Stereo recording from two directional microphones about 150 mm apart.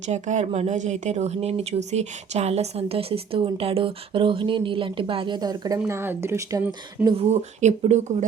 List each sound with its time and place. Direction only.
0.1 s speech: 50° right (ahead or behind); by 6.7 s 15° right (ahead or behind)
7.2 s speech: 45° right (ahead or behind)